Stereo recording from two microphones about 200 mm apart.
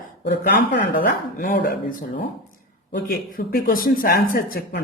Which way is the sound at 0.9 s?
45° left (ahead or behind).